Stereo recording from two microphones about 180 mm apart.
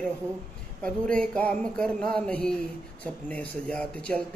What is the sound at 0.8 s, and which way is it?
Speech, 5° left (ahead or behind).